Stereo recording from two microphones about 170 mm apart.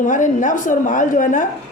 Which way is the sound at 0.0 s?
50° left (ahead or behind).